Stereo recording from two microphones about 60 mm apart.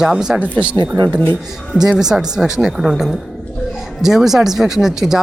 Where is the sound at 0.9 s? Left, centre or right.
Right.